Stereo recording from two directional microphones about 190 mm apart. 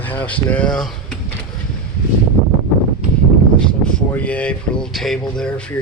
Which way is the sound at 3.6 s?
5° left (ahead or behind).